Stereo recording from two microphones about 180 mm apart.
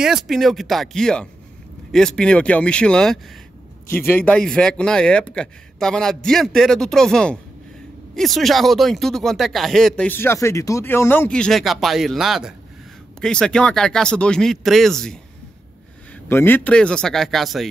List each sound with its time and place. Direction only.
0.0 s speech: centre (ahead or behind)
16.3 s speech: 10° left (ahead or behind)